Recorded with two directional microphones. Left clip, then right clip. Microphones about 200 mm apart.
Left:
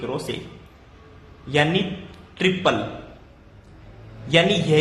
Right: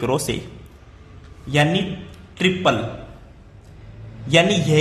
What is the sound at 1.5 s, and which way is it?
A woman's voice, 20° right (ahead or behind).